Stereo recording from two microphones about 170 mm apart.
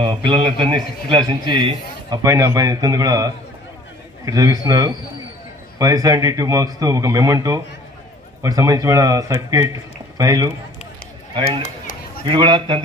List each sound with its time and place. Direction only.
0.0 s a man's voice: 30° right (ahead or behind)
12.3 s a man's voice: 30° right (ahead or behind)